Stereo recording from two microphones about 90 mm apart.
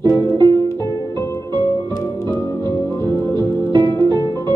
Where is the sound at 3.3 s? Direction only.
55° right (ahead or behind).